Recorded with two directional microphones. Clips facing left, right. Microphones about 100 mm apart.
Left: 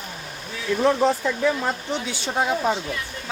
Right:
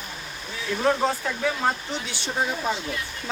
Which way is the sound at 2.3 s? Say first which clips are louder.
Left 4 dB; 75° left (ahead or behind).